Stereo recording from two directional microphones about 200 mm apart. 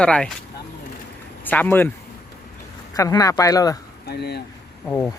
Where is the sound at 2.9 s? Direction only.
15° left (ahead or behind).